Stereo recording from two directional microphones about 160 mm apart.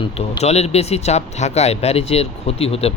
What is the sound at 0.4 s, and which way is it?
Speech, 40° left (ahead or behind).